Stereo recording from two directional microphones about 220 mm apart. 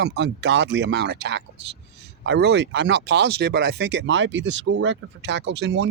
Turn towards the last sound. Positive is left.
turn(degrees=-50)  # may be behind; listen again after turning